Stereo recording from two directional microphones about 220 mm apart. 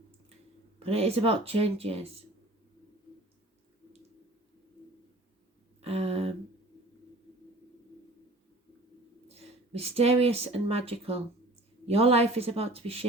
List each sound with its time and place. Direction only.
0.8 s speech: 25° right (ahead or behind)
5.8 s a sound: 30° right (ahead or behind)
9.3 s speech: 30° right (ahead or behind)